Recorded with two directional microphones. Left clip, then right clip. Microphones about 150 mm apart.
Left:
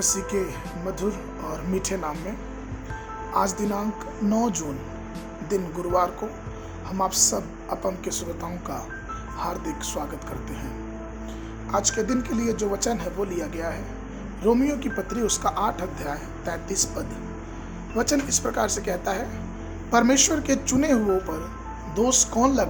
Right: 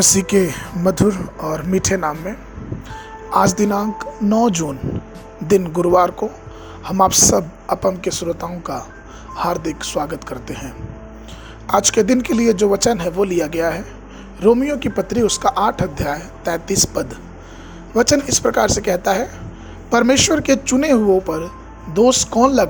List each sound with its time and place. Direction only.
0.0 s speech: 60° right (ahead or behind); by 2.1 s 40° right (ahead or behind)
3.2 s speech: 50° right (ahead or behind)
11.7 s speech: 50° right (ahead or behind)